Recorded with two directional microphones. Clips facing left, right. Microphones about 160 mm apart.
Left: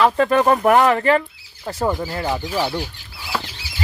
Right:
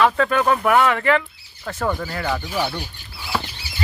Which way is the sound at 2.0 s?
25° left (ahead or behind).